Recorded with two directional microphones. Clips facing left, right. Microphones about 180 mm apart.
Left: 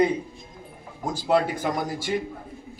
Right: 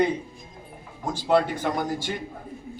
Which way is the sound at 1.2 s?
10° left (ahead or behind).